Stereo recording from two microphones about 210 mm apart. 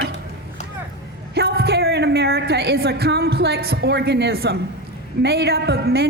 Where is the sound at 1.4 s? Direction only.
50° right (ahead or behind).